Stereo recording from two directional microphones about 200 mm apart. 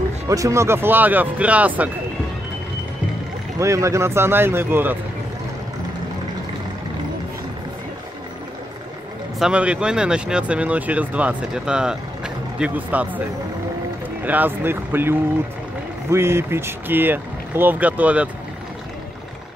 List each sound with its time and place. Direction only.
0.3 s speech: 15° right (ahead or behind)
3.5 s speech: 15° right (ahead or behind)
9.4 s speech: 5° right (ahead or behind)
14.2 s speech: 10° right (ahead or behind)